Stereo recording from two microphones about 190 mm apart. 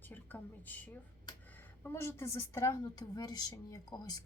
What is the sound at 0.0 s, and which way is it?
A woman's voice, 10° left (ahead or behind).